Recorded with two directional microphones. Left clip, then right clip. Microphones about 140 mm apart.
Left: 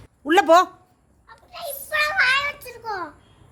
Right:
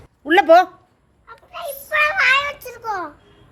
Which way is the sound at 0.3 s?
30° left (ahead or behind).